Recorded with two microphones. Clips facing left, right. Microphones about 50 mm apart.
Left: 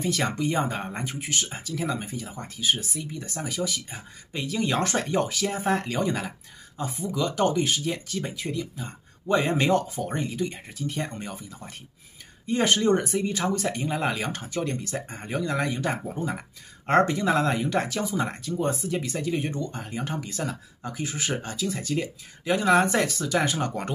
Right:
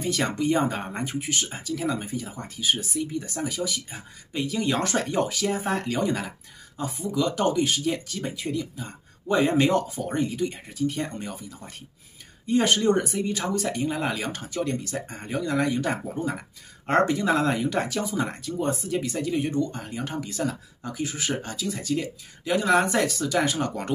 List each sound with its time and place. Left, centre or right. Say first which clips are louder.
0.0 s speech: right 1 dB; centre